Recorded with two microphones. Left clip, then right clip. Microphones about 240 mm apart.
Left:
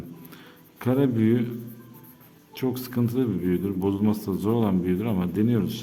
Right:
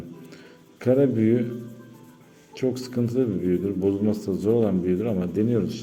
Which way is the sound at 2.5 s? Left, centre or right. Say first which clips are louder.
Right 2 dB; centre.